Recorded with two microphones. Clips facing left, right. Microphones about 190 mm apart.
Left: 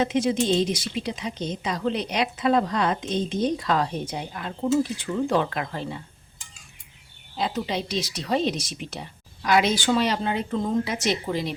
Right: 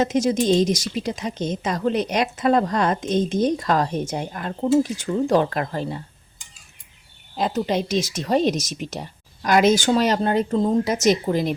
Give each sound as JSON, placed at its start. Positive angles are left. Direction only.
{"t": 0.0, "sound": "a woman's voice", "side_deg": -40}
{"t": 7.3, "sound": "a woman's voice", "side_deg": -45}